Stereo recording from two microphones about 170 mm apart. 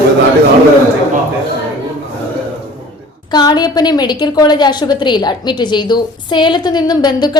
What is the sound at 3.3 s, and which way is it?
A woman's voice, 25° left (ahead or behind).